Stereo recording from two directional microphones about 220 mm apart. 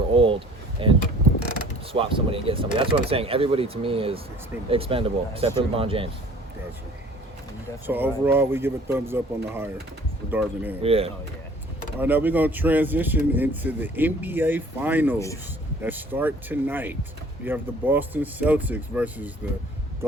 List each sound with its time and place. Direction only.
0.1 s vehicle: 25° right (ahead or behind)
1.9 s speech: 25° right (ahead or behind)
7.9 s speech: 10° right (ahead or behind)
10.8 s speech: 25° right (ahead or behind)
11.9 s speech: 10° right (ahead or behind)